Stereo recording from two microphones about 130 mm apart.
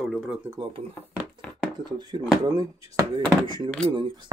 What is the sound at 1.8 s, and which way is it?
Speech, 35° right (ahead or behind).